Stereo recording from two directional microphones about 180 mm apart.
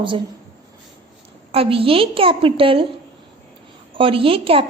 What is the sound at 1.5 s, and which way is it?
A woman's voice, 30° right (ahead or behind).